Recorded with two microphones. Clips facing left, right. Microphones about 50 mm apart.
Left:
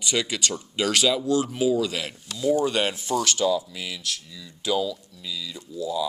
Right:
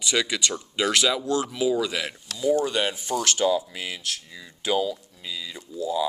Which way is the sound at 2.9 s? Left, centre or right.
Right.